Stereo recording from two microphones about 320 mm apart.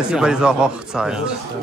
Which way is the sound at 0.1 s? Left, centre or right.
Centre.